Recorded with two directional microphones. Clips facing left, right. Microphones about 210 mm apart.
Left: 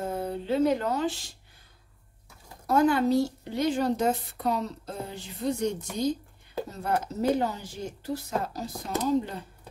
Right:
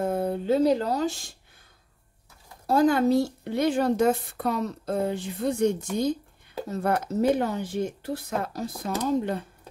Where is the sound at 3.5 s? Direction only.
55° right (ahead or behind).